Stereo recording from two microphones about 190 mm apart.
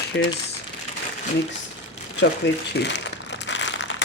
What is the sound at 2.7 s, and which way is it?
Crumpling, 65° left (ahead or behind).